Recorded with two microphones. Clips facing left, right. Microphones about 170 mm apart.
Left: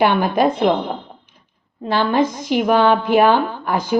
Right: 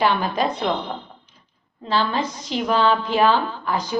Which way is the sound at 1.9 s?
55° left (ahead or behind).